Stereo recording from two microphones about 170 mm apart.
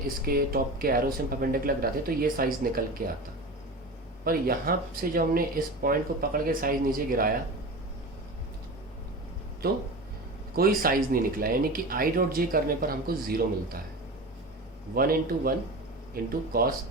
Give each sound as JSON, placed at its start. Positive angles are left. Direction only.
{"t": 0.3, "sound": "speech", "side_deg": -60}
{"t": 4.2, "sound": "speech", "side_deg": -60}
{"t": 10.8, "sound": "speech", "side_deg": -60}
{"t": 14.9, "sound": "speech", "side_deg": -60}